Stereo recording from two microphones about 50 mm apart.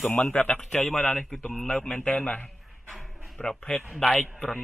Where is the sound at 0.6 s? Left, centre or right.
Centre.